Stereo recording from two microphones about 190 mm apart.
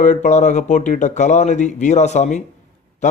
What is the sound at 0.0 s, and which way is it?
A man's voice, 40° left (ahead or behind).